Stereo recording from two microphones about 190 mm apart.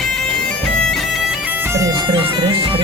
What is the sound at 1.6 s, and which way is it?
Bagpipes, 15° right (ahead or behind).